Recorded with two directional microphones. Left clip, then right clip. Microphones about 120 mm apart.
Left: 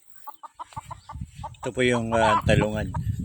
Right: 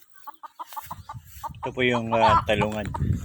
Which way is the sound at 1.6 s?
50° left (ahead or behind).